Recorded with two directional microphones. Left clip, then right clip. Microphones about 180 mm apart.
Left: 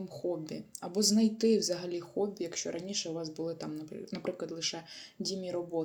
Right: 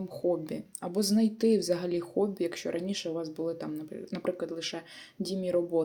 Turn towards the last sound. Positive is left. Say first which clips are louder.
# right 7 dB
turn(degrees=-35)  # may be behind; listen again after turning